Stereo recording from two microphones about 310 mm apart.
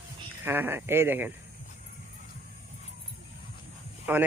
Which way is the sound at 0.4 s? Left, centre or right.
Centre.